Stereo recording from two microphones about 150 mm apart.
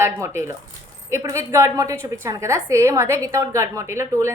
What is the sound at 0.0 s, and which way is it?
A woman's voice, 15° right (ahead or behind).